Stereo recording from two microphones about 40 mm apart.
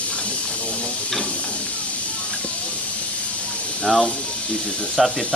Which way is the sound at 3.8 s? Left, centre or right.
Centre.